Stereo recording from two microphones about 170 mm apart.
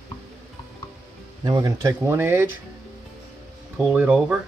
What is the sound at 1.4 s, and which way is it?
Speech, 20° right (ahead or behind).